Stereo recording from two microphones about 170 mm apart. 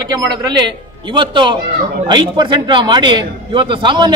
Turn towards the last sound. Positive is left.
turn(degrees=-25)  # may be behind; listen again after turning